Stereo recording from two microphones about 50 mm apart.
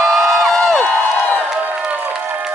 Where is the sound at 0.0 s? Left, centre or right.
Centre.